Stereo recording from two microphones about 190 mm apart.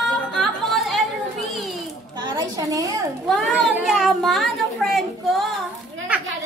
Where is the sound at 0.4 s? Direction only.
Centre (ahead or behind).